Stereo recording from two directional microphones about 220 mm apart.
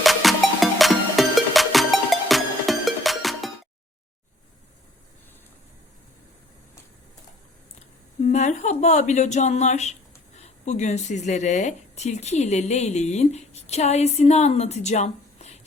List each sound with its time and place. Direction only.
0.0 s music: centre (ahead or behind)
8.3 s a woman's voice: 30° left (ahead or behind)